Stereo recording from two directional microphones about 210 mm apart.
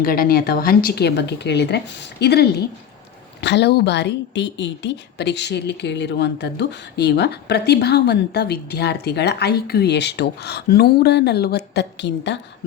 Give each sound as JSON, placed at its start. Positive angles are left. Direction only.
{"t": 0.0, "sound": "speech", "side_deg": 45}